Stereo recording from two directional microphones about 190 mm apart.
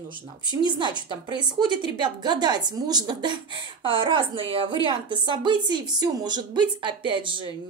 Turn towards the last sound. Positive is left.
turn(degrees=-25)  # may be behind; listen again after turning